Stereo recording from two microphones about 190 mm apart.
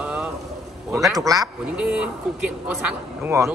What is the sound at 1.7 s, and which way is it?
Speech, 5° right (ahead or behind).